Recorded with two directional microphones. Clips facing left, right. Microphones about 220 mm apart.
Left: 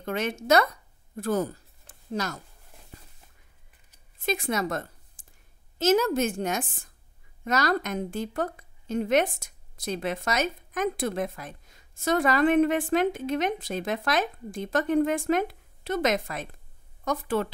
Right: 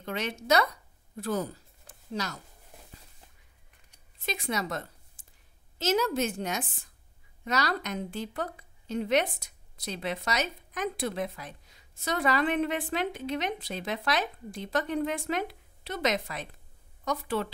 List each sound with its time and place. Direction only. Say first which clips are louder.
0.0 s a woman's voice: left 4 dB; 50° left (ahead or behind)
4.3 s a woman's voice: left 5 dB; 50° left (ahead or behind)